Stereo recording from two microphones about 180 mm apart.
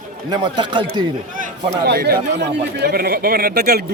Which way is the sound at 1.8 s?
60° right (ahead or behind).